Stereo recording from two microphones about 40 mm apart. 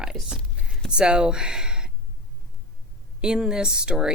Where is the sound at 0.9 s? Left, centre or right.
Right.